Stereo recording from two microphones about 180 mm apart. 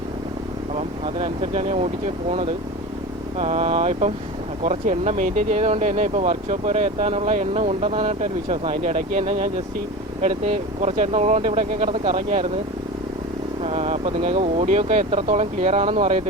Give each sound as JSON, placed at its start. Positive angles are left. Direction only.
{"t": 0.8, "sound": "speech", "side_deg": -35}
{"t": 3.3, "sound": "speech", "side_deg": -35}
{"t": 13.6, "sound": "speech", "side_deg": -35}